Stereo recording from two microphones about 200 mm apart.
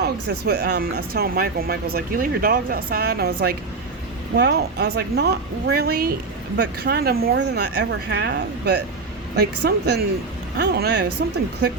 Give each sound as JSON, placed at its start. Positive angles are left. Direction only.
{"t": 0.0, "sound": "speech", "side_deg": -55}